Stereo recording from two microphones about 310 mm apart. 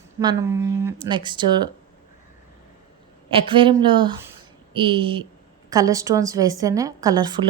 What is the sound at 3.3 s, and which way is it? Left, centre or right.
A woman's voice, centre.